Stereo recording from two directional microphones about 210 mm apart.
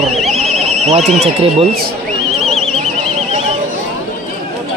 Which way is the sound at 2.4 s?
Centre (ahead or behind).